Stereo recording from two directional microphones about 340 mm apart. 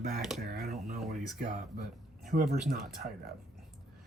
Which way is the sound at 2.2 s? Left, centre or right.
Right.